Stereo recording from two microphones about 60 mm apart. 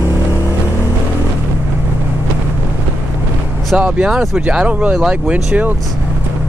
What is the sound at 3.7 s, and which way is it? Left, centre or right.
Speech, centre.